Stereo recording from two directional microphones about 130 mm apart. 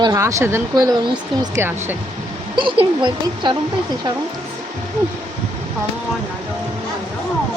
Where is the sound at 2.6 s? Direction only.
40° right (ahead or behind).